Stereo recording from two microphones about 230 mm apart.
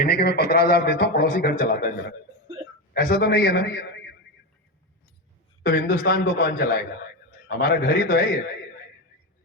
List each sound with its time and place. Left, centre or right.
0.0 s a man's voice: left
5.6 s a man's voice: left